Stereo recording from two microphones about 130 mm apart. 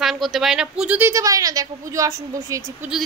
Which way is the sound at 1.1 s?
25° right (ahead or behind).